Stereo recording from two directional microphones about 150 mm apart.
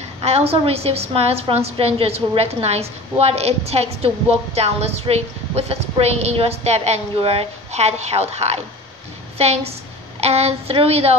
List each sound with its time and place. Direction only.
0.2 s a woman's voice: 40° right (ahead or behind)